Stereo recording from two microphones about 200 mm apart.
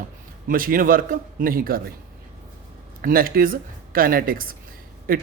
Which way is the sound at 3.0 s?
45° right (ahead or behind).